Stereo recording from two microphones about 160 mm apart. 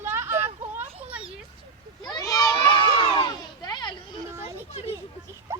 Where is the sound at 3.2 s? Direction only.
25° left (ahead or behind).